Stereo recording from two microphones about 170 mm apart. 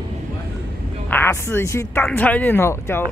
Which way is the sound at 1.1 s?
15° left (ahead or behind).